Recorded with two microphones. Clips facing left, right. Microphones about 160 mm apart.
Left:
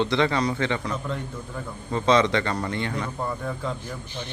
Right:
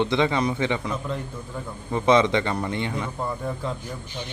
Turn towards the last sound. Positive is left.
turn(degrees=-10)  # may be behind; listen again after turning